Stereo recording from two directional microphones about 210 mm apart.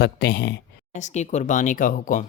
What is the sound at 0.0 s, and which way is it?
Speech, 50° left (ahead or behind).